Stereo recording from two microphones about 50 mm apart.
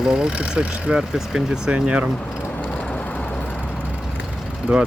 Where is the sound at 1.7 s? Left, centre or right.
Right.